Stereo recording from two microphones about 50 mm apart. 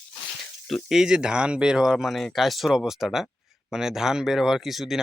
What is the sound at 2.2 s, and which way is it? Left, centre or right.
Speech, centre.